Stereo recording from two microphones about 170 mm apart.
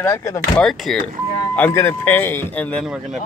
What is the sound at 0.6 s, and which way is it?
Speech, centre (ahead or behind).